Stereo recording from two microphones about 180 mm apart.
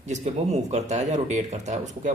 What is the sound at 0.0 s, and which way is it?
Speech, 40° right (ahead or behind).